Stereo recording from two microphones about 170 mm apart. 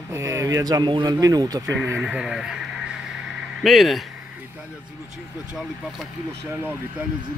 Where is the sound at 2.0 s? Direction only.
5° right (ahead or behind).